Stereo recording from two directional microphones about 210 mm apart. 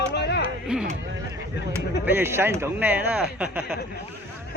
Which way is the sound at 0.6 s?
5° right (ahead or behind).